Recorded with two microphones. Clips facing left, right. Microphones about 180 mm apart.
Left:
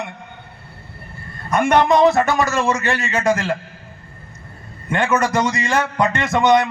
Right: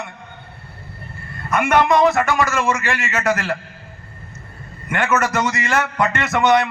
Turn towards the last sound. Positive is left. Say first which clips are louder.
# left 1 dB
turn(degrees=15)  # may be behind; listen again after turning